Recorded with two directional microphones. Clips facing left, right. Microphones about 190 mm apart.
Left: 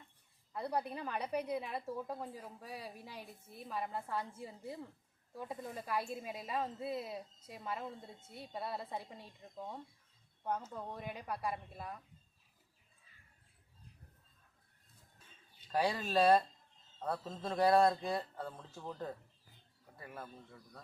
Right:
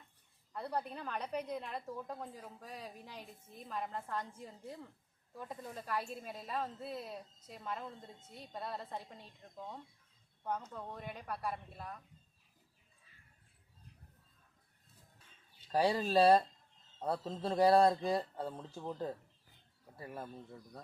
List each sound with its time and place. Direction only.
0.5 s a woman's voice: 10° left (ahead or behind)
15.7 s speech: 35° right (ahead or behind)